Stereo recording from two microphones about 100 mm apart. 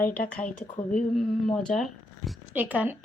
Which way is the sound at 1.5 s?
10° left (ahead or behind).